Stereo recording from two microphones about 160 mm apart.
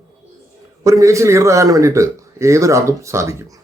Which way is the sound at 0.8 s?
20° right (ahead or behind).